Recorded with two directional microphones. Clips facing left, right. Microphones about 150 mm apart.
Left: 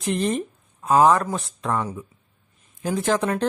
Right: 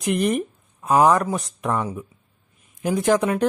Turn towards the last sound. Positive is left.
turn(degrees=-15)  # may be behind; listen again after turning